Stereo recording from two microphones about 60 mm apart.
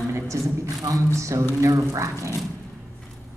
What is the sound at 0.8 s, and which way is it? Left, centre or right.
A woman's voice, right.